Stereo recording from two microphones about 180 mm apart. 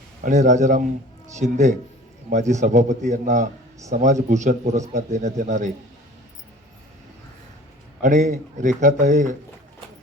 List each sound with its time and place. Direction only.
0.2 s speech: 45° right (ahead or behind)
8.0 s speech: 45° right (ahead or behind)